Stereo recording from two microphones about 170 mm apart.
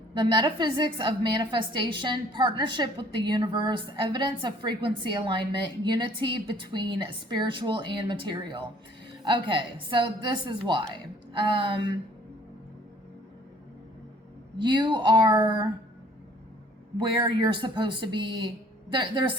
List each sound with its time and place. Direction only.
0.1 s a woman's voice: 25° right (ahead or behind)
14.6 s a woman's voice: 25° right (ahead or behind)
17.0 s a woman's voice: 25° right (ahead or behind)